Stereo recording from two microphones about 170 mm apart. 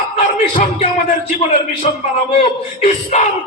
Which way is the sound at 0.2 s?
45° left (ahead or behind).